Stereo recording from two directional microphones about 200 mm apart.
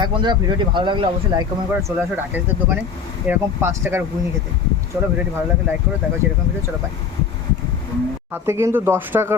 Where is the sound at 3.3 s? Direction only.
10° right (ahead or behind).